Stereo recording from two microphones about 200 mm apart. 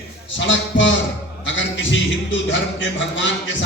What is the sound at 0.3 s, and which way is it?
A man's voice, 65° left (ahead or behind).